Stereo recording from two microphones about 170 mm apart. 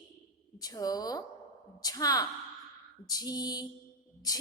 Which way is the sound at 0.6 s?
20° left (ahead or behind).